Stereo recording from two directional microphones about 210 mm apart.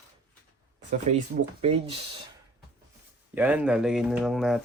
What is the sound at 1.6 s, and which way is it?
Speech, 25° right (ahead or behind).